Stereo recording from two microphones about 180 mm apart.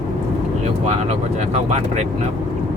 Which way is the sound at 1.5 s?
35° right (ahead or behind).